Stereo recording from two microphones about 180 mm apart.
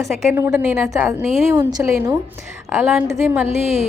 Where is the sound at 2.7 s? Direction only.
10° right (ahead or behind).